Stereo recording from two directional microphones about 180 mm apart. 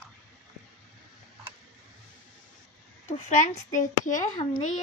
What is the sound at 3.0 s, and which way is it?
Speech, 40° left (ahead or behind).